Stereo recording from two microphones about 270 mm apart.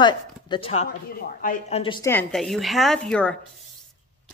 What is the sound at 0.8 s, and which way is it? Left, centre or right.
Speech, left.